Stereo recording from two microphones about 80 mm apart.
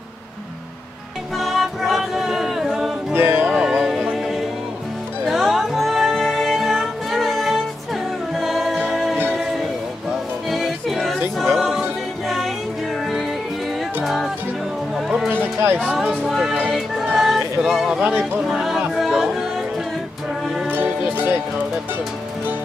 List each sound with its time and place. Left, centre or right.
1.4 s a capella: centre
3.1 s music: right
3.8 s music: centre
10.5 s music: centre
14.0 s music: centre
15.4 s music: right
15.9 s a sound: centre
16.3 s music: centre
18.0 s speech: right
18.4 s music: centre
20.6 s music: right